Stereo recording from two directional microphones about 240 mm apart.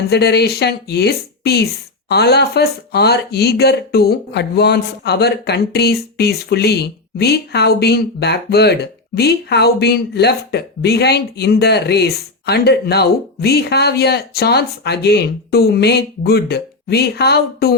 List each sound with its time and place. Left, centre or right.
0.1 s speech: left